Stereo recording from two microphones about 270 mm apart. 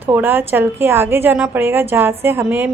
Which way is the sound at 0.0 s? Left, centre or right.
Centre.